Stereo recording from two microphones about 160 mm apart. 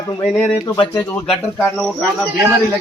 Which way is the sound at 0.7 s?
35° left (ahead or behind).